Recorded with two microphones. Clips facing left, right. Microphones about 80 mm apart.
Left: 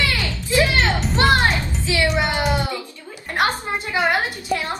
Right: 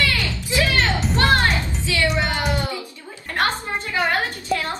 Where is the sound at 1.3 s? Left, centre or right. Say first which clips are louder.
Left 1 dB; centre.